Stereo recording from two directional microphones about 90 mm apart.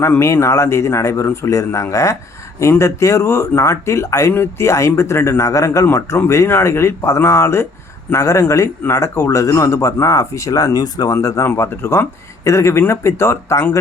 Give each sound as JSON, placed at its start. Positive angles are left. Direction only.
{"t": 0.0, "sound": "a man's voice", "side_deg": 25}